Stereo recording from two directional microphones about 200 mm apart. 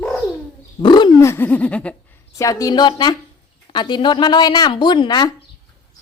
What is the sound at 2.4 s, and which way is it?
Speech, 15° left (ahead or behind).